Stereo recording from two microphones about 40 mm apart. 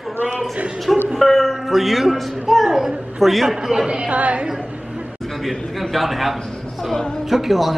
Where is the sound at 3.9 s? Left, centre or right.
Right.